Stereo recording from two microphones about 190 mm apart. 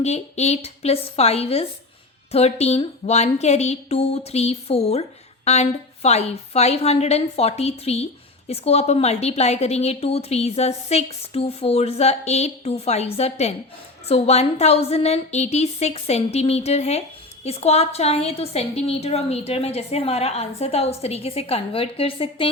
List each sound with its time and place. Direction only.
0.0 s a woman's voice: 35° left (ahead or behind)